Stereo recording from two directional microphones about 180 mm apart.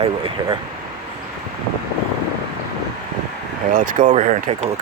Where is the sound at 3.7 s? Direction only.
45° right (ahead or behind).